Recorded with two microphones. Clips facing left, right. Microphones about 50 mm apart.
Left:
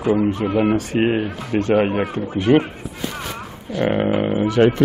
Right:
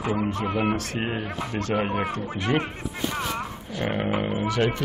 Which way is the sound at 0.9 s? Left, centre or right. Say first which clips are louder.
Left 9 dB; left.